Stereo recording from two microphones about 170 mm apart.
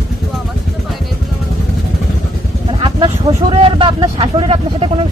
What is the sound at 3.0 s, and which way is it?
Speech, 30° right (ahead or behind).